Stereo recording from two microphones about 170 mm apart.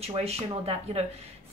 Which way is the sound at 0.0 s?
35° right (ahead or behind).